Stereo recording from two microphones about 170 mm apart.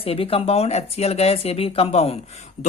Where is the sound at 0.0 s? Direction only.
35° left (ahead or behind).